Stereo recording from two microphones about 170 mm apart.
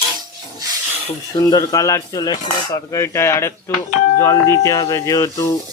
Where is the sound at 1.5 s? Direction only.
20° left (ahead or behind).